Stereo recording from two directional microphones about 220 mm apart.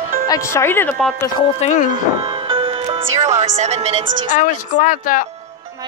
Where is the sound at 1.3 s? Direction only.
30° left (ahead or behind).